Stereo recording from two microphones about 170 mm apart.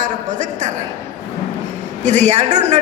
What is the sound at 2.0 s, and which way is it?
Speech, 45° right (ahead or behind).